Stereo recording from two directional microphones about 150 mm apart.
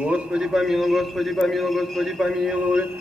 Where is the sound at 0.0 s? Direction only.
5° right (ahead or behind).